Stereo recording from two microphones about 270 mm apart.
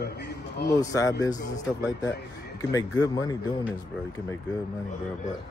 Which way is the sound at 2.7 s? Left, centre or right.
Centre.